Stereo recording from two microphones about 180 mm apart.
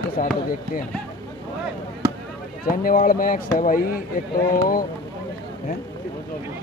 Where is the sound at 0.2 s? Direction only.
50° left (ahead or behind).